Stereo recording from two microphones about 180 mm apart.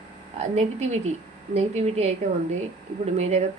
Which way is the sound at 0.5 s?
40° right (ahead or behind).